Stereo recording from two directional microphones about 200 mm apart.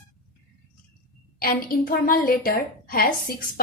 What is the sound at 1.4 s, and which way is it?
A woman's voice, 45° left (ahead or behind).